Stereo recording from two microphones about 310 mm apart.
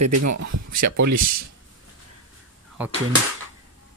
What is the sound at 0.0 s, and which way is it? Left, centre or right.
Speech, right.